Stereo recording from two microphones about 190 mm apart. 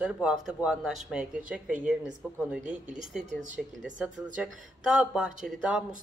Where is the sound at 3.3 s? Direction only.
40° right (ahead or behind).